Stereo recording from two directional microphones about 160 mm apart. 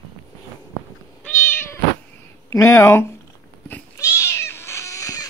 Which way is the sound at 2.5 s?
20° left (ahead or behind).